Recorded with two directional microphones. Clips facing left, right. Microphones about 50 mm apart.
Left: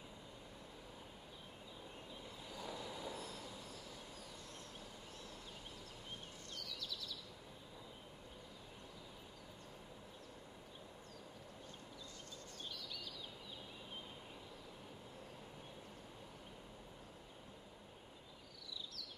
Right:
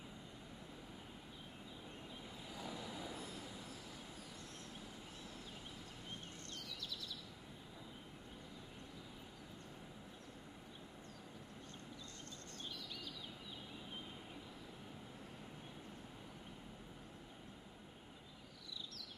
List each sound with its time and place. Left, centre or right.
2.5 s train: centre